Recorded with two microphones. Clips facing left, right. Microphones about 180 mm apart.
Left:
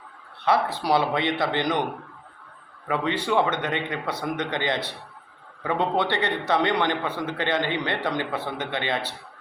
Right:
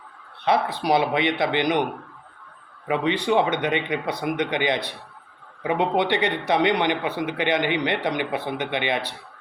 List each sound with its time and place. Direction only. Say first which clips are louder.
0.4 s speech: right 1 dB; 15° right (ahead or behind)
2.8 s speech: right 3 dB; 20° right (ahead or behind)